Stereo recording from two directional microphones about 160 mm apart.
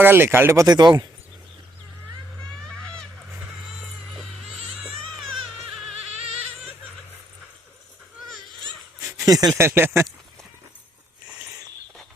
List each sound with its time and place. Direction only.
0.0 s speech: 15° right (ahead or behind)
9.1 s a sound: 25° right (ahead or behind)
9.6 s speech: 15° right (ahead or behind)